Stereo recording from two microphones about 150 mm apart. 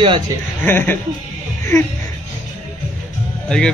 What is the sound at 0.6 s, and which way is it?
Speech, 15° left (ahead or behind).